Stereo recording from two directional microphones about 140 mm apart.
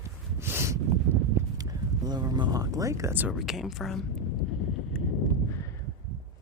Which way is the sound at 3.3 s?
Centre (ahead or behind).